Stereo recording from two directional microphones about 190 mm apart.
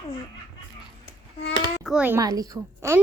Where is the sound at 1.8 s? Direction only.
5° right (ahead or behind).